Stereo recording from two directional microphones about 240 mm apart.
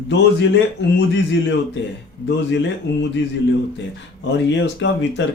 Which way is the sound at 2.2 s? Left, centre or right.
Left.